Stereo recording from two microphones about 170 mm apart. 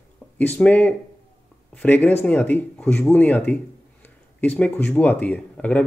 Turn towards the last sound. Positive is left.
turn(degrees=10)  # may be behind; listen again after turning